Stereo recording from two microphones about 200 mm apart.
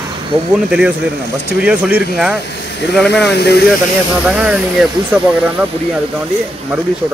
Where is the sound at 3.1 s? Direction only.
55° left (ahead or behind).